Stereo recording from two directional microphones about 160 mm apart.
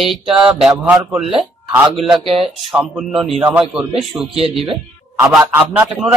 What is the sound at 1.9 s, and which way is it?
Speech, centre (ahead or behind).